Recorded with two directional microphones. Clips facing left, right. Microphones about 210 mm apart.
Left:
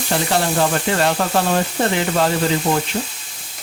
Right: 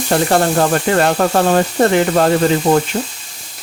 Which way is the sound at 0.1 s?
50° right (ahead or behind).